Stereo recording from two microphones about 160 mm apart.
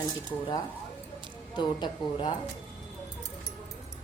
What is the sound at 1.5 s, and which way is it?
Speech, 25° left (ahead or behind).